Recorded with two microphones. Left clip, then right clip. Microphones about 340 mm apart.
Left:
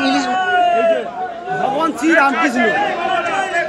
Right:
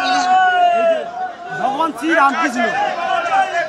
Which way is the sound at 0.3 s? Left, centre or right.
Right.